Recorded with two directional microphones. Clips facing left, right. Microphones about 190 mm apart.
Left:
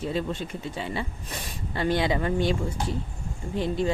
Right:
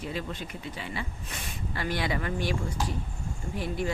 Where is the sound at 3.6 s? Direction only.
25° left (ahead or behind).